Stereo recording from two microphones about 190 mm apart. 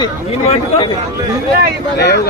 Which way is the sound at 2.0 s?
60° left (ahead or behind).